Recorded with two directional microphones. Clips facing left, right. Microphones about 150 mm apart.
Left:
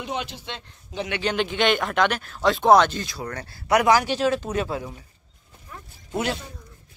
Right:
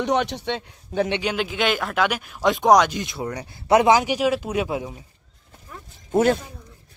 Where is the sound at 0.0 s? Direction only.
70° right (ahead or behind).